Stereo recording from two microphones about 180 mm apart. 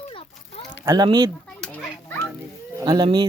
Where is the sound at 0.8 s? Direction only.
20° right (ahead or behind).